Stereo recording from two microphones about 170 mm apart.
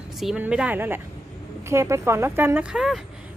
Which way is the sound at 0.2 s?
5° right (ahead or behind).